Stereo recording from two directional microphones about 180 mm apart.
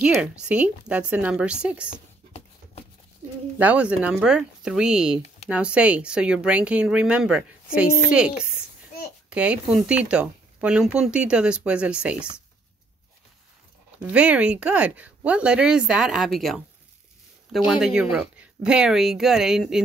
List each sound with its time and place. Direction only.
0.0 s a woman's voice: 5° right (ahead or behind)
1.9 s a sound: 35° left (ahead or behind)
3.5 s speech: 10° right (ahead or behind)
14.1 s speech: 5° right (ahead or behind)